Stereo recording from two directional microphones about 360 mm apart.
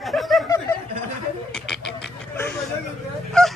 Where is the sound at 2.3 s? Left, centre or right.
Centre.